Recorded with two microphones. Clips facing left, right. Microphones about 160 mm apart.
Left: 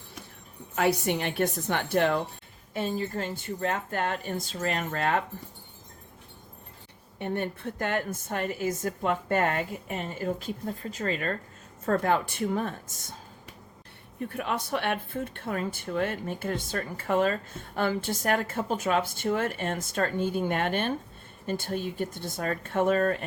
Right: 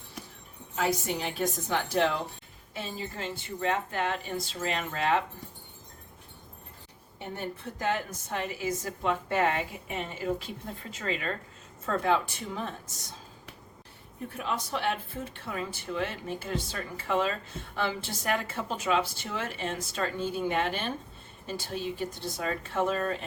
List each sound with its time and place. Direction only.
0.8 s a woman's voice: 65° left (ahead or behind)
7.2 s a woman's voice: 60° left (ahead or behind)
14.3 s a woman's voice: 60° left (ahead or behind)